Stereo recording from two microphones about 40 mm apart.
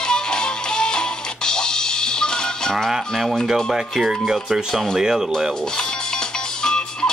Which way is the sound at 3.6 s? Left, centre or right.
Centre.